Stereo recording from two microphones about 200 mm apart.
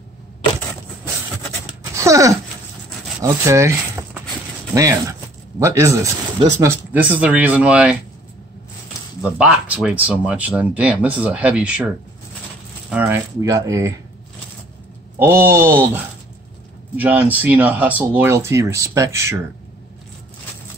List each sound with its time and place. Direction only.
2.0 s speech: 15° right (ahead or behind)
9.2 s speech: 5° right (ahead or behind)
12.9 s speech: 5° right (ahead or behind)
15.1 s speech: 10° right (ahead or behind)